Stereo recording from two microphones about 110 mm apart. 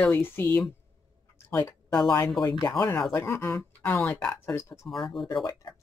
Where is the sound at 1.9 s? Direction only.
35° left (ahead or behind).